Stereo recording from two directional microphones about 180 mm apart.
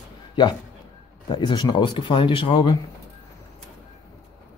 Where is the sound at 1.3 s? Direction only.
25° left (ahead or behind).